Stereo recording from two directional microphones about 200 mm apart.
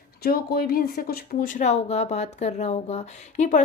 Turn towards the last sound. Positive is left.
turn(degrees=35)  # may be behind; listen again after turning